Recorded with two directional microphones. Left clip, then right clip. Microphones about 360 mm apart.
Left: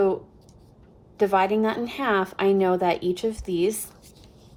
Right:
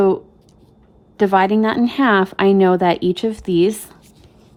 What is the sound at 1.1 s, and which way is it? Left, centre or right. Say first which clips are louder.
A woman's voice: right 6 dB; right.